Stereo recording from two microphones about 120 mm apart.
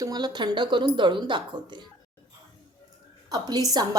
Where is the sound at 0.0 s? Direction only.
35° right (ahead or behind).